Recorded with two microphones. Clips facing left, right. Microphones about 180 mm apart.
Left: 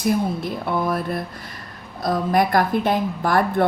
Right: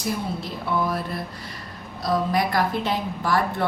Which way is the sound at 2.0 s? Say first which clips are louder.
Left 3 dB; 50° left (ahead or behind).